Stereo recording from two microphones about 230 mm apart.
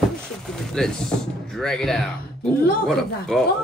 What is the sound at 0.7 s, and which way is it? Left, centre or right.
Speech, centre.